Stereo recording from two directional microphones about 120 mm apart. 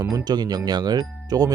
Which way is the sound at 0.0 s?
35° right (ahead or behind).